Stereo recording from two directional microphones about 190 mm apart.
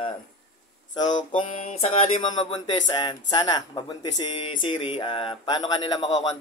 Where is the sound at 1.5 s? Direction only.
35° left (ahead or behind).